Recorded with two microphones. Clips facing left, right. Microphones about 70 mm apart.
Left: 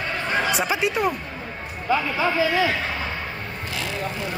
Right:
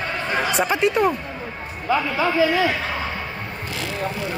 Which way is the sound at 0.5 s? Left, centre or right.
Centre.